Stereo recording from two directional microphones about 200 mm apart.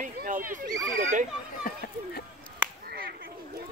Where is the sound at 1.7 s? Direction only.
45° left (ahead or behind).